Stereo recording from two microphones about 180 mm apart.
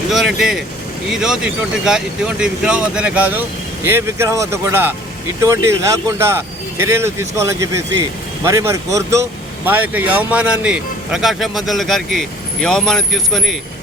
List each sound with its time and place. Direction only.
0.1 s speech: centre (ahead or behind)